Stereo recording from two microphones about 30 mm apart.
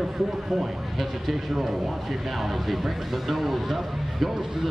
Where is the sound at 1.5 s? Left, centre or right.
Centre.